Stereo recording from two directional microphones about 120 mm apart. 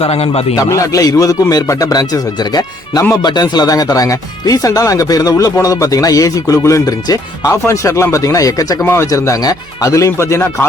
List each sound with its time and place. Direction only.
0.0 s a man's voice: 55° left (ahead or behind)
0.5 s a man's voice: 30° left (ahead or behind)